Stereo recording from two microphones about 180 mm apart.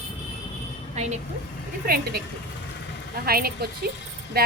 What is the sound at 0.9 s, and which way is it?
Speech, 40° right (ahead or behind).